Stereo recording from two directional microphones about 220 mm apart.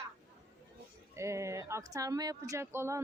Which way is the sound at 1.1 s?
15° right (ahead or behind).